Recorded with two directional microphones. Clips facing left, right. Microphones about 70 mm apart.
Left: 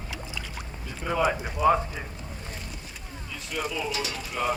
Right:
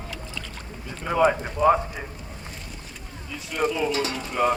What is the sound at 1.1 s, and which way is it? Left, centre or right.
Speech, centre.